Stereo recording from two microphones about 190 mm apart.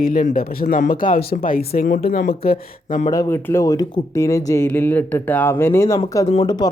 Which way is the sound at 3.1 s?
15° left (ahead or behind).